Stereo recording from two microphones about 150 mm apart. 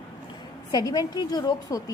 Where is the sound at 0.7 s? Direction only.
25° left (ahead or behind).